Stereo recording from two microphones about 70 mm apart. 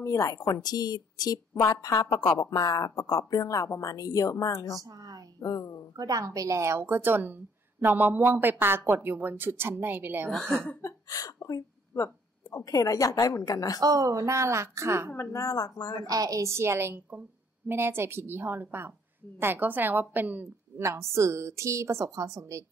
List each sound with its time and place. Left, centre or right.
0.0 s speech: left
1.5 s speech: left
4.8 s speech: right
5.4 s a sound: left
5.9 s a woman's voice: right
10.8 s a sound: left
11.4 s a woman's voice: left
13.7 s a woman's voice: right
15.1 s speech: left
16.0 s a woman's voice: right
16.5 s a woman's voice: right
20.7 s a woman's voice: right